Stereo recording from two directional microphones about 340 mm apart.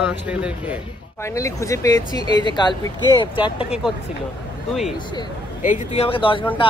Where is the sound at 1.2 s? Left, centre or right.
Centre.